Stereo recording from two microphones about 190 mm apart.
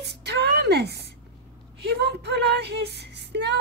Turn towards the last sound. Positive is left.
turn(degrees=-60)  # may be behind; listen again after turning